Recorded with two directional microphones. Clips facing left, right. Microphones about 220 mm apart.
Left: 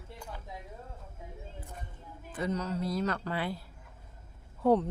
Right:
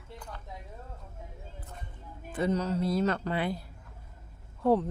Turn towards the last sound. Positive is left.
turn(degrees=0)  # may be behind; listen again after turning